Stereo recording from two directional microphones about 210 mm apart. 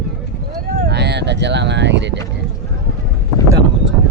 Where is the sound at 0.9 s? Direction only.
55° right (ahead or behind).